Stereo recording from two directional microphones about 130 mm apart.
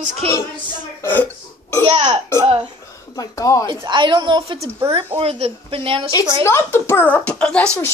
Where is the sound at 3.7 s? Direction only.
35° right (ahead or behind).